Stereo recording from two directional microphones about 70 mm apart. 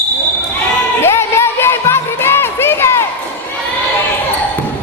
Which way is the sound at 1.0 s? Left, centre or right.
Left.